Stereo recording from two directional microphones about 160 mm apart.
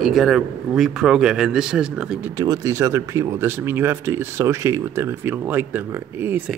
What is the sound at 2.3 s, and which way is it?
Speech, 20° right (ahead or behind).